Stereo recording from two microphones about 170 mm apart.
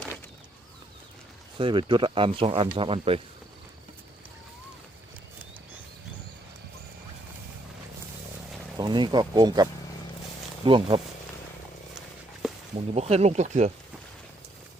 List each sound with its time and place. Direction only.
1.5 s speech: 30° right (ahead or behind)
8.8 s speech: 25° right (ahead or behind)
10.7 s speech: 30° right (ahead or behind)
12.4 s a sound: 5° right (ahead or behind)
12.9 s speech: 40° right (ahead or behind)